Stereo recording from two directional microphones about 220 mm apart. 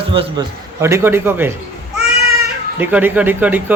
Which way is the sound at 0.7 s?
15° right (ahead or behind).